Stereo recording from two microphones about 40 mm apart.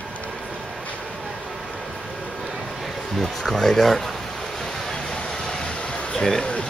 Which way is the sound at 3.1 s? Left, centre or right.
Centre.